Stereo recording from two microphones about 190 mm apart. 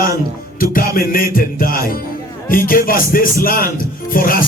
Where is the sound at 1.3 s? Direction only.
50° left (ahead or behind).